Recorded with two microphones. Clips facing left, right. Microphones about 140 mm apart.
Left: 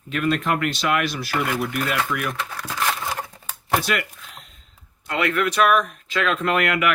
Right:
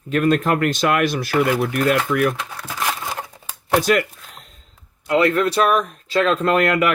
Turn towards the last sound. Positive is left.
turn(degrees=-35)  # may be behind; listen again after turning